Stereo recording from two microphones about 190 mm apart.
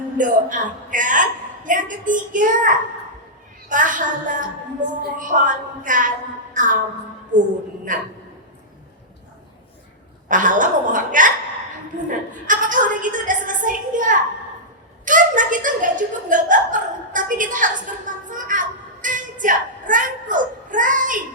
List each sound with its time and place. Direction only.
0.2 s a woman's voice: 45° right (ahead or behind)
10.2 s a woman's voice: 45° right (ahead or behind)
12.0 s a sound: 45° right (ahead or behind)
15.0 s a woman's voice: 45° right (ahead or behind)